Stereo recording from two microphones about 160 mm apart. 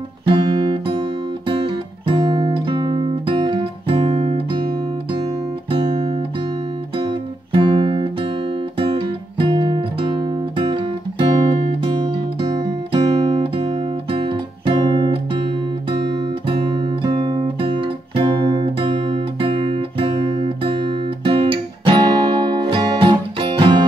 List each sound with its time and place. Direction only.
0.3 s music: 30° right (ahead or behind)
2.0 s guitar: 25° right (ahead or behind)
5.7 s guitar: 25° right (ahead or behind)
7.0 s music: 30° right (ahead or behind)
9.4 s guitar: 30° right (ahead or behind)
10.6 s music: 30° right (ahead or behind)
11.8 s guitar: 30° right (ahead or behind)
16.4 s guitar: 30° right (ahead or behind)